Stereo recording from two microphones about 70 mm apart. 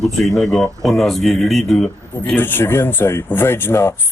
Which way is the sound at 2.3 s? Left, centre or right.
Left.